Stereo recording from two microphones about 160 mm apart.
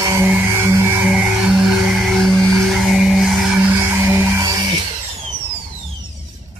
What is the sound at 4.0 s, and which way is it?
Music, 15° right (ahead or behind).